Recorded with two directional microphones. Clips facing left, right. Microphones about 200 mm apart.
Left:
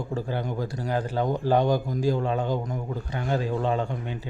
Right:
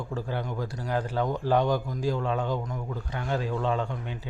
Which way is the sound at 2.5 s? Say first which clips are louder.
Left 3 dB; 25° left (ahead or behind).